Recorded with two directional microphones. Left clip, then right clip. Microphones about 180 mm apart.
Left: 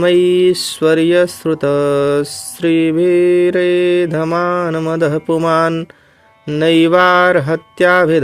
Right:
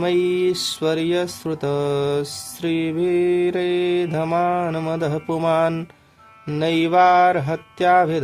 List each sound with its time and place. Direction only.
0.0 s mantra: 30° left (ahead or behind)